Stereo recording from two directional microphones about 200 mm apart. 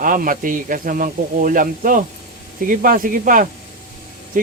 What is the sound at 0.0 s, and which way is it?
Speech, 40° right (ahead or behind).